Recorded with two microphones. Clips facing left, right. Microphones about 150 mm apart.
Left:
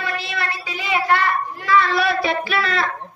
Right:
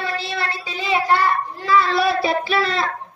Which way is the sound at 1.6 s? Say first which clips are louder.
Right 1 dB; 30° right (ahead or behind).